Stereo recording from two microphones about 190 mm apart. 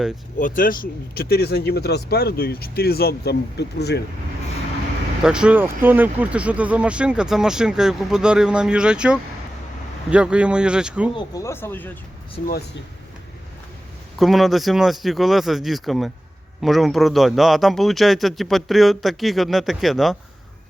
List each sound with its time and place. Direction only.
0.3 s speech: 45° left (ahead or behind); by 4.0 s 60° left (ahead or behind)
5.2 s speech: 5° right (ahead or behind)
11.1 s speech: 15° left (ahead or behind)
14.2 s speech: centre (ahead or behind)